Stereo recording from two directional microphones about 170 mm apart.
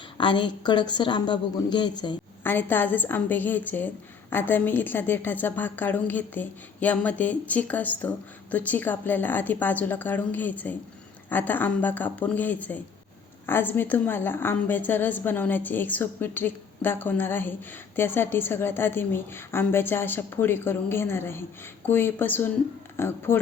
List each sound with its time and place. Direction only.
0.2 s speech: 30° left (ahead or behind)
2.4 s a woman's voice: 10° left (ahead or behind)